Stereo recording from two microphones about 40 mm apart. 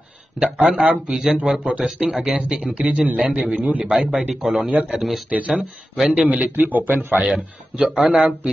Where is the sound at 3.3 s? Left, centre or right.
Right.